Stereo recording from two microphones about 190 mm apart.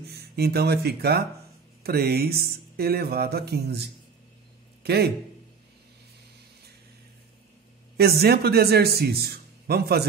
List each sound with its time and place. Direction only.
0.0 s a man's voice: 55° right (ahead or behind)
8.0 s speech: 55° right (ahead or behind)